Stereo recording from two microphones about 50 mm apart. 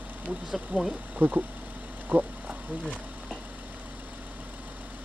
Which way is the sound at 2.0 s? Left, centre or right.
Right.